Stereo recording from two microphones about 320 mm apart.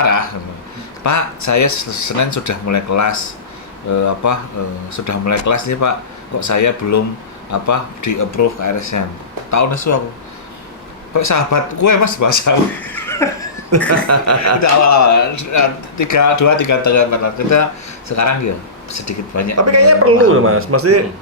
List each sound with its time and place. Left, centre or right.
1.0 s speech: left
11.1 s speech: left
12.8 s a sound: centre
13.7 s a man's voice: right
14.6 s speech: left
19.5 s a man's voice: right